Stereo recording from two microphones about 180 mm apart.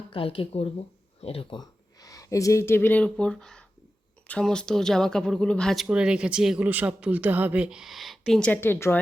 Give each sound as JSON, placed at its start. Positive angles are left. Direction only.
{"t": 0.1, "sound": "speech", "side_deg": 30}